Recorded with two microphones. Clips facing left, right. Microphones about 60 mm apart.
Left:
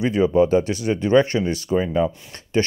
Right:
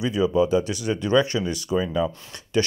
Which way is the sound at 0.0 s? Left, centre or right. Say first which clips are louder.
Left 4 dB; left.